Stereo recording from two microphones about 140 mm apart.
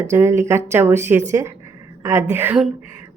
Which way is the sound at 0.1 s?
20° right (ahead or behind).